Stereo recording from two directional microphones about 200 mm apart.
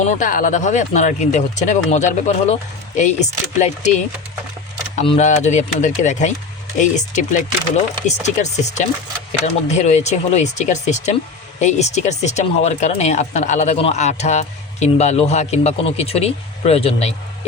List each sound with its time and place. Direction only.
0.0 s speech: 40° left (ahead or behind)